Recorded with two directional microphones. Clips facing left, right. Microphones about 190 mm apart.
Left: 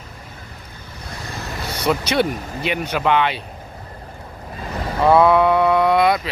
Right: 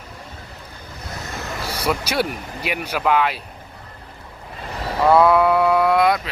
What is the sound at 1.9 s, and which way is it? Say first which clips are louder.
Speech: left 4 dB; 5° right (ahead or behind).